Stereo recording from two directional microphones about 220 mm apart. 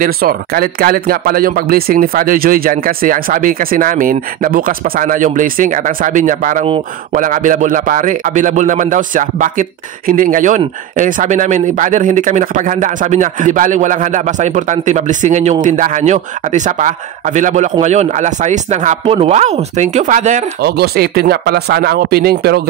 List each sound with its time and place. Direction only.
0.0 s speech: 40° right (ahead or behind)
20.6 s speech: 45° right (ahead or behind)